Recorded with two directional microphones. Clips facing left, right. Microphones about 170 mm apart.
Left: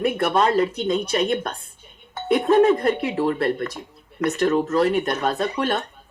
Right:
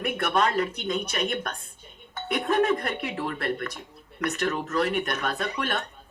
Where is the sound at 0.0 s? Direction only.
25° left (ahead or behind).